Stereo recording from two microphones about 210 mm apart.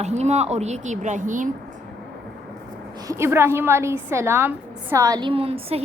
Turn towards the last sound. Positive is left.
turn(degrees=-25)  # may be behind; listen again after turning